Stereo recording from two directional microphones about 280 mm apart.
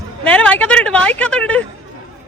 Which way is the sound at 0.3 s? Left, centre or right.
Centre.